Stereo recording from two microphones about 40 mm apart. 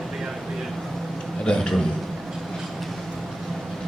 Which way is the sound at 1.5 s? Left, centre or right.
Centre.